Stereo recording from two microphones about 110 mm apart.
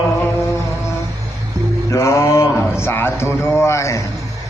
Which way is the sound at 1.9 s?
25° left (ahead or behind).